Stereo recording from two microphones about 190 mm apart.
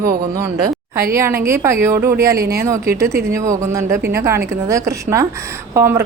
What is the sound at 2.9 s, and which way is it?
A woman's voice, 15° right (ahead or behind).